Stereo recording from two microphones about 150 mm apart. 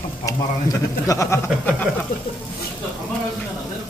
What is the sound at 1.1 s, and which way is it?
Speech, 20° left (ahead or behind).